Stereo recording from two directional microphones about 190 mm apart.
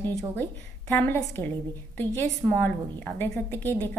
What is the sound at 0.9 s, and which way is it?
A woman's voice, 10° left (ahead or behind).